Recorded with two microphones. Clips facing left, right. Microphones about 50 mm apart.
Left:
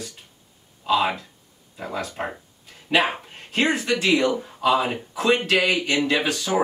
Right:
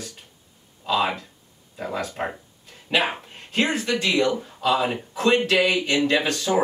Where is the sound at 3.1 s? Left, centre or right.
Centre.